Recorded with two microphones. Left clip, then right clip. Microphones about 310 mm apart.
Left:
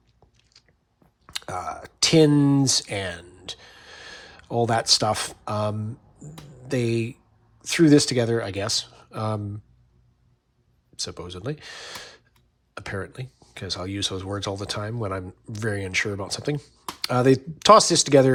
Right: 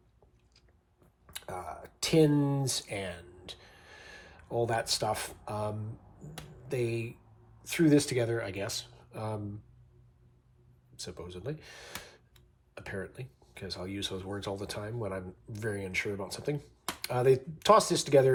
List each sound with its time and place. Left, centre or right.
1.3 s speech: left
10.9 s speech: left